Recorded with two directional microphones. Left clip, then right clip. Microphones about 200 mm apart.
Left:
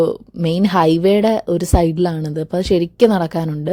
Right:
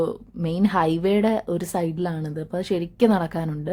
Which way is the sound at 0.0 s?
35° left (ahead or behind).